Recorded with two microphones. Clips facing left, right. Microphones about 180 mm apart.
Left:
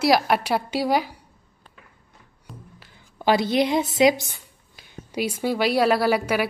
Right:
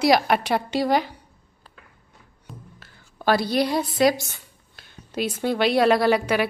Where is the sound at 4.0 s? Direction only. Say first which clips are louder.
Left 1 dB; 20° left (ahead or behind).